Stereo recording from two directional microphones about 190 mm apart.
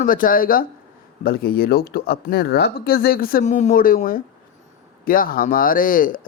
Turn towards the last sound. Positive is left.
turn(degrees=45)  # may be behind; listen again after turning